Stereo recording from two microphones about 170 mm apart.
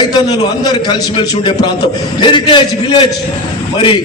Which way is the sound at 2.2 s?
30° left (ahead or behind).